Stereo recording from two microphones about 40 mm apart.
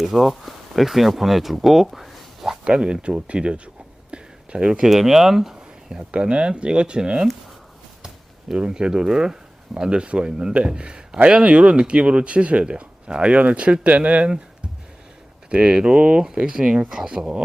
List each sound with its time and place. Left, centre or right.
0.0 s speech: centre
2.6 s speech: right
4.1 s a sound: right
4.9 s speech: centre
6.1 s speech: right
8.5 s speech: right
15.4 s speech: right